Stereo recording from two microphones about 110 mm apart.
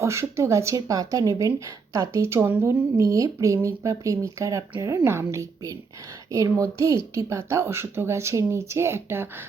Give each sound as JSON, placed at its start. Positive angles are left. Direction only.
{"t": 0.0, "sound": "speech", "side_deg": -25}